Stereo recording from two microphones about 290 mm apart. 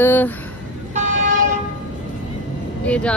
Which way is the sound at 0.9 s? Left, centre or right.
Right.